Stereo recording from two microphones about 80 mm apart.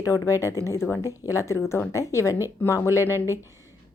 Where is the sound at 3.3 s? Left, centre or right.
Right.